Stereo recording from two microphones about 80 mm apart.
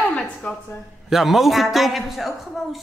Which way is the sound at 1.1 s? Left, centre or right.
Centre.